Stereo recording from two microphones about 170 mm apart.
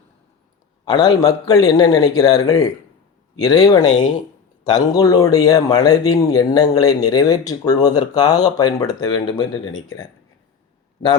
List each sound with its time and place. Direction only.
0.9 s a man's voice: 20° left (ahead or behind)